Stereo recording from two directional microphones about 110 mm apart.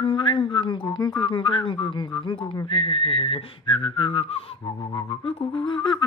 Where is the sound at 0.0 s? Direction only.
50° left (ahead or behind).